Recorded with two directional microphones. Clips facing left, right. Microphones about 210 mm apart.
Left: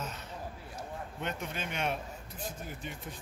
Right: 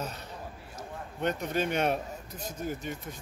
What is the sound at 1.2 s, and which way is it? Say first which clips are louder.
Speech: right 9 dB; 40° right (ahead or behind).